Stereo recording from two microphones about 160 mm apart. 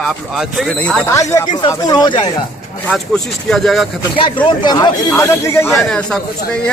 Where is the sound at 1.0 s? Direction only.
20° left (ahead or behind).